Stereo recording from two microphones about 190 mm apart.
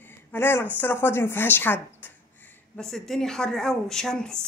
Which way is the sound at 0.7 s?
10° left (ahead or behind).